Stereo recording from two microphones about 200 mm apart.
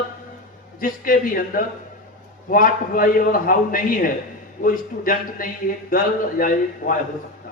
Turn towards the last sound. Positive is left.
turn(degrees=45)  # may be behind; listen again after turning